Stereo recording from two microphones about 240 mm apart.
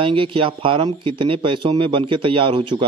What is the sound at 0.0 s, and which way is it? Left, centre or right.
A man's voice, right.